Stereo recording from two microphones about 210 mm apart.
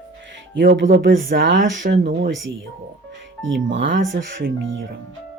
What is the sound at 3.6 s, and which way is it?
Speech, 65° right (ahead or behind).